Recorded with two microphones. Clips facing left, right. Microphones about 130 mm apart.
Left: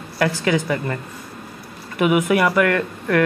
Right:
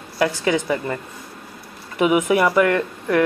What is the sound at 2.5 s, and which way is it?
Speech, 20° right (ahead or behind).